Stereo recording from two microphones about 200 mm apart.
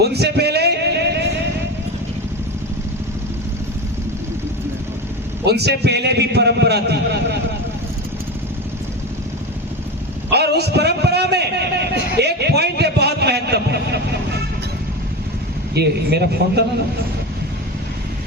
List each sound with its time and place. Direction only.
0.0 s a sound: 55° right (ahead or behind)
5.5 s a man's voice: 55° right (ahead or behind)
10.2 s a man's voice: 55° right (ahead or behind)
15.7 s a man's voice: 55° right (ahead or behind)